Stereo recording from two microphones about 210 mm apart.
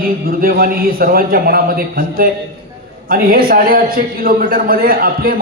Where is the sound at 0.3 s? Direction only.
45° right (ahead or behind).